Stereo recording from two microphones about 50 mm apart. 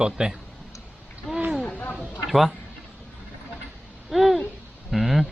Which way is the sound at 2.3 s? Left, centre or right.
Centre.